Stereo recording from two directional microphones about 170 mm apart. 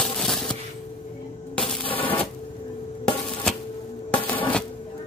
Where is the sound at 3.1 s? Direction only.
30° left (ahead or behind).